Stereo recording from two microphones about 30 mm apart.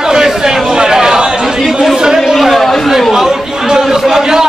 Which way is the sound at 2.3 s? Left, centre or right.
Centre.